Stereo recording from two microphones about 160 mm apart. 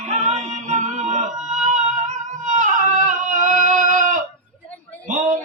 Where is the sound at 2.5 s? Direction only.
55° right (ahead or behind).